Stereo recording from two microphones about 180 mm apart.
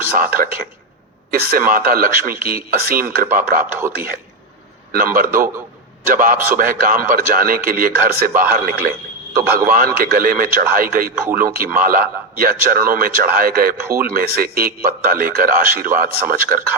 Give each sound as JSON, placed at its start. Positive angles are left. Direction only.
{"t": 0.2, "sound": "a man's voice", "side_deg": -55}
{"t": 3.8, "sound": "a man's voice", "side_deg": -15}
{"t": 4.9, "sound": "a man's voice", "side_deg": -55}